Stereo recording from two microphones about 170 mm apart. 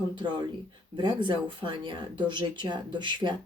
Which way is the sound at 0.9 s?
25° right (ahead or behind).